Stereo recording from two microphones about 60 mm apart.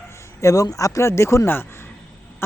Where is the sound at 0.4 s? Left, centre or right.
Left.